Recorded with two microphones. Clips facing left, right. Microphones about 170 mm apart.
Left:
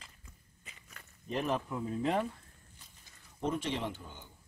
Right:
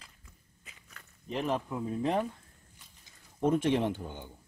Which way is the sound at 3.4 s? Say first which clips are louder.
Right 8 dB; 50° right (ahead or behind).